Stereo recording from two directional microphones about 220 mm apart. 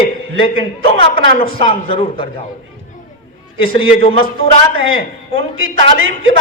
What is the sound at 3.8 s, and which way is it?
Speech, 25° left (ahead or behind).